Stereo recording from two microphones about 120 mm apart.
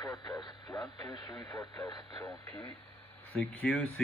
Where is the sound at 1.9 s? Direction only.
40° left (ahead or behind).